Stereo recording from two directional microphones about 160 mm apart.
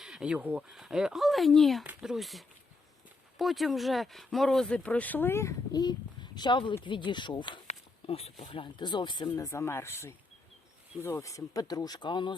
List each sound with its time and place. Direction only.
0.0 s speech: 5° right (ahead or behind); by 9.3 s 30° left (ahead or behind)
9.3 s speech: 15° left (ahead or behind)